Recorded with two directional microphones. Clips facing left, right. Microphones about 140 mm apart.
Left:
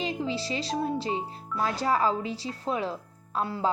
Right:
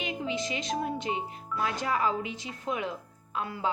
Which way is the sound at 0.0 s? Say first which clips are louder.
Left 2 dB; 35° left (ahead or behind).